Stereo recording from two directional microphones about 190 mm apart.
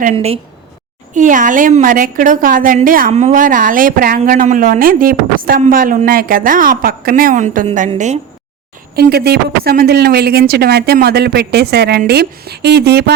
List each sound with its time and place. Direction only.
0.0 s a woman's voice: 35° right (ahead or behind)
9.0 s speech: 55° right (ahead or behind)